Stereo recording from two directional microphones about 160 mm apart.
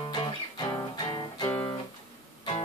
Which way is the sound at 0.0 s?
30° left (ahead or behind).